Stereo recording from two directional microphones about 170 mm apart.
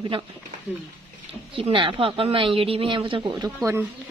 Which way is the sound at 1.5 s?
30° right (ahead or behind).